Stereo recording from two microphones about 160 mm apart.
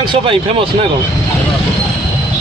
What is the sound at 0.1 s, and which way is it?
Speech, 35° right (ahead or behind).